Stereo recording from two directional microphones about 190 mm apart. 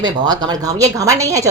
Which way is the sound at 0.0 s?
20° right (ahead or behind).